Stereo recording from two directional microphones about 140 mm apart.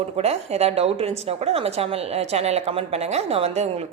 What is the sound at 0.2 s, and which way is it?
A woman's voice, 50° right (ahead or behind).